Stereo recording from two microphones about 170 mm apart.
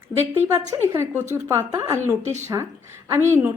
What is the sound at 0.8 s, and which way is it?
Speech, 15° right (ahead or behind).